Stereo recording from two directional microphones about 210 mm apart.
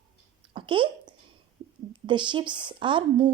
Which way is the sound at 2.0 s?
20° right (ahead or behind).